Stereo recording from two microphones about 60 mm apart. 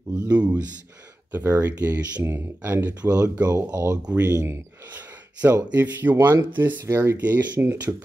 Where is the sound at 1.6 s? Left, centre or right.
Right.